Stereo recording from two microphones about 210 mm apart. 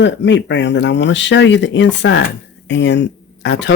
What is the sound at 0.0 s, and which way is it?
Speech, 60° left (ahead or behind).